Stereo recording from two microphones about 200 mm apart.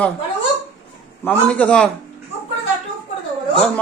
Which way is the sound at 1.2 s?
5° left (ahead or behind).